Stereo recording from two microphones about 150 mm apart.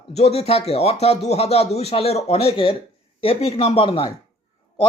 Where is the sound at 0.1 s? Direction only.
45° left (ahead or behind).